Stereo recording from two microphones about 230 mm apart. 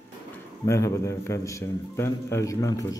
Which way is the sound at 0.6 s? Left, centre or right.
Centre.